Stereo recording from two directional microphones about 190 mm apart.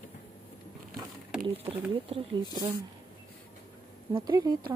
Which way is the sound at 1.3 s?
5° right (ahead or behind).